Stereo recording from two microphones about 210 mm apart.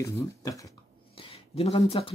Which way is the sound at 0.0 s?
15° left (ahead or behind).